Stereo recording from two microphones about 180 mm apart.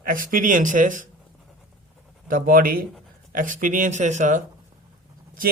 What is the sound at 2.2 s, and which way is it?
Speech, 45° right (ahead or behind).